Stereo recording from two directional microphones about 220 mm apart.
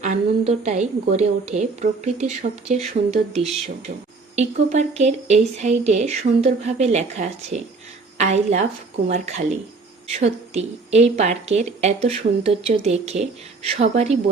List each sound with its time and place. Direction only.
0.0 s a woman's voice: 30° right (ahead or behind)